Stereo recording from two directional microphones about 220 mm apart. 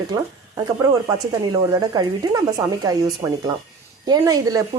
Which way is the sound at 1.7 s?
15° right (ahead or behind).